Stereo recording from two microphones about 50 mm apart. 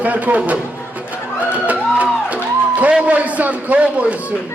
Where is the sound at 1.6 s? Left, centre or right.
Right.